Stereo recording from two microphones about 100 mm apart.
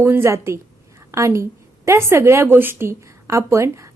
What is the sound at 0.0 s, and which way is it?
A woman's voice, 25° right (ahead or behind).